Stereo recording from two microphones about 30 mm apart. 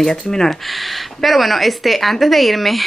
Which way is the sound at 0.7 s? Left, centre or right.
Centre.